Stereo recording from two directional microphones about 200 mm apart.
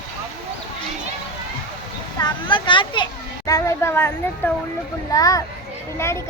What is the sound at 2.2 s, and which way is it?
Children playing, 20° left (ahead or behind).